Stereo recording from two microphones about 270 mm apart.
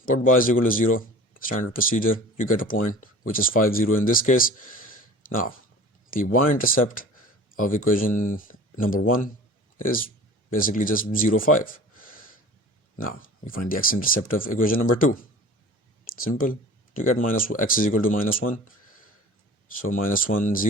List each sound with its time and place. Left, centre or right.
0.1 s a man's voice: left
16.0 s a sound: left
16.4 s speech: left
19.8 s speech: left